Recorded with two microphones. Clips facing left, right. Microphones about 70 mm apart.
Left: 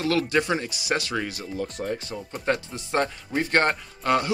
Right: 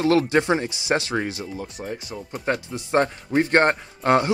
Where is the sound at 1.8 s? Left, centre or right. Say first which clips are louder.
Left 2 dB; centre.